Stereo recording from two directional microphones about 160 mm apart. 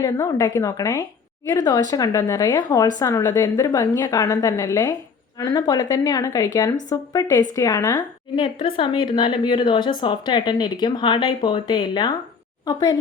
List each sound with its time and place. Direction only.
0.0 s a woman's voice: 20° left (ahead or behind)
8.4 s a woman's voice: 35° left (ahead or behind)